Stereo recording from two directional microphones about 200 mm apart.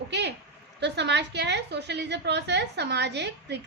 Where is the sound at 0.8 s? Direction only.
60° right (ahead or behind).